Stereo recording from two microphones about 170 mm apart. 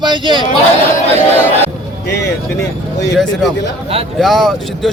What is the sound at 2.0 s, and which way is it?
Speech, 85° left.